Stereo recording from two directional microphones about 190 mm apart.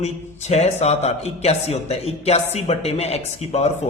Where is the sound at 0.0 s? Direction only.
35° left (ahead or behind).